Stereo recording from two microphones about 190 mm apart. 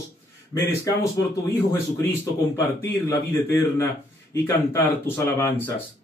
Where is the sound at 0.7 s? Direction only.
15° left (ahead or behind).